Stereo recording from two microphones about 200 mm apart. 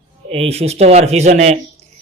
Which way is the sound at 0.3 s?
30° right (ahead or behind).